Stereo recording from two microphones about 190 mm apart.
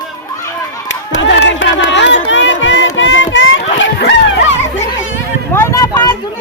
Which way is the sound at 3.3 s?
90° left.